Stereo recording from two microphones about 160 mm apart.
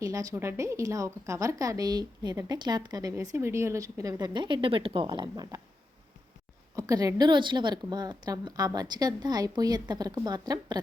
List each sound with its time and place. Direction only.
0.0 s a woman's voice: 20° right (ahead or behind)
6.7 s a woman's voice: 20° right (ahead or behind)